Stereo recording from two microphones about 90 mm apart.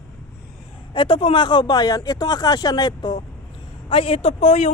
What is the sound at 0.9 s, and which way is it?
Speech, 70° left (ahead or behind).